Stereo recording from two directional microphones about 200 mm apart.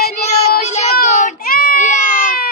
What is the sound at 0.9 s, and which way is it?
Baby cry, 40° left (ahead or behind).